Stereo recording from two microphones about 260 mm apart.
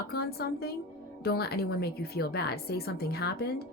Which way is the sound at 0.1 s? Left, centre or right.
Left.